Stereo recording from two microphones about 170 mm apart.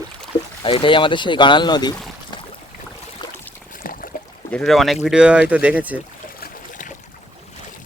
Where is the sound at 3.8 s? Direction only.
55° left (ahead or behind).